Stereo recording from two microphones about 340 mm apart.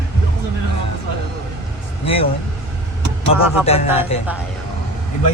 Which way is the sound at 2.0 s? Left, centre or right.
Centre.